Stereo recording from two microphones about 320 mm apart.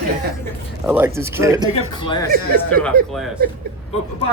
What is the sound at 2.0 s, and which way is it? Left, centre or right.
Speech, centre.